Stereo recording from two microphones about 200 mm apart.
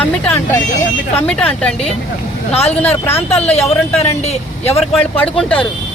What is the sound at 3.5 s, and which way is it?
Speech, 30° left (ahead or behind).